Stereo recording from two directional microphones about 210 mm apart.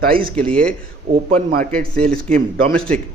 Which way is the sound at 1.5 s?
40° right (ahead or behind).